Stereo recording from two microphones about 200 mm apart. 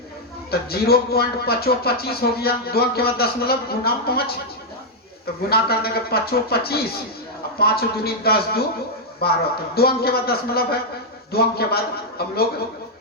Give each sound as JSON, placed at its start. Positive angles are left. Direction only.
{"t": 0.7, "sound": "speech", "side_deg": 50}
{"t": 5.5, "sound": "speech", "side_deg": 50}